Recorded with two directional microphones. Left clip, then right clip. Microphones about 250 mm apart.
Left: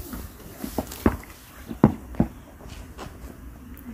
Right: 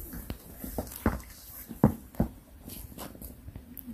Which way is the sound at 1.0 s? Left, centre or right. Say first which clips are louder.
Left 8 dB; right.